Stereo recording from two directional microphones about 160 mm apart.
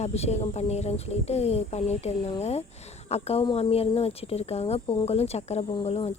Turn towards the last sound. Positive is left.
turn(degrees=40)  # may be behind; listen again after turning